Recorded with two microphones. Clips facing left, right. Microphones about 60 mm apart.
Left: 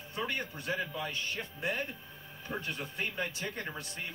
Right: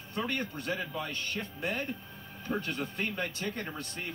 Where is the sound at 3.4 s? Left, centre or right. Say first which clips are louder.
Right 2 dB; right.